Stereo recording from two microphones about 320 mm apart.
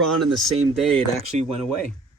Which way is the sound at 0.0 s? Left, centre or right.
Centre.